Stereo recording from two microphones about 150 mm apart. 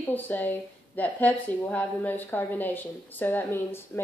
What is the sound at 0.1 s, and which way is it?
A woman's voice, 10° left (ahead or behind).